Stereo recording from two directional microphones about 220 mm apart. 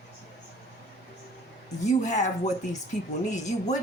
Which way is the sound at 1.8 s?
35° left (ahead or behind).